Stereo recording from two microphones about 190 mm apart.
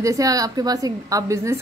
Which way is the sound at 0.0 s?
15° right (ahead or behind).